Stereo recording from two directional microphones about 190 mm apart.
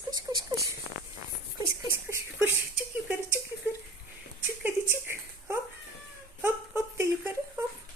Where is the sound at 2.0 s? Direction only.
15° right (ahead or behind).